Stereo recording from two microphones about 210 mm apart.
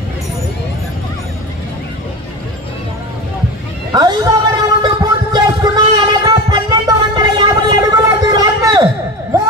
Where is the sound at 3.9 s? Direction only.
20° right (ahead or behind).